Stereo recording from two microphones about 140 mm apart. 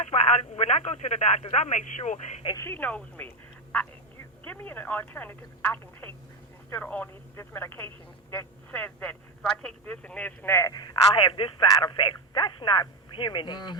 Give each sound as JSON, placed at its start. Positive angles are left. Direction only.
{"t": 0.0, "sound": "speech", "side_deg": 50}
{"t": 2.6, "sound": "speech", "side_deg": 15}
{"t": 10.9, "sound": "speech", "side_deg": 35}